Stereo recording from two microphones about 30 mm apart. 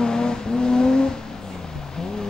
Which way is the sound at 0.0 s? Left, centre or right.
Left.